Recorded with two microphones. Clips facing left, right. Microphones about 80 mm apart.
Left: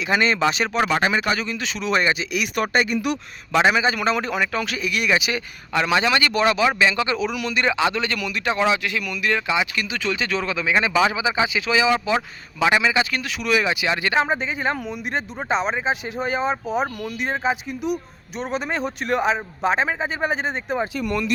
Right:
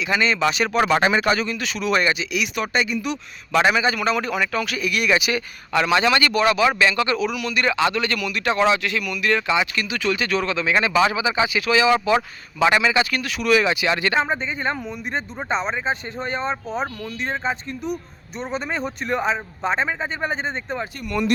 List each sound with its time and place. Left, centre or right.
0.4 s speech: left
0.9 s a man's voice: centre
1.2 s speech: centre; by 3.2 s left
3.6 s speech: left
7.3 s a man's voice: left
7.6 s speech: centre
9.8 s speech: centre
10.2 s speech: centre